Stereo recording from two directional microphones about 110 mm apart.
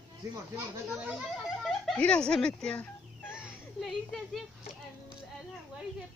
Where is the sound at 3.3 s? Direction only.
5° right (ahead or behind).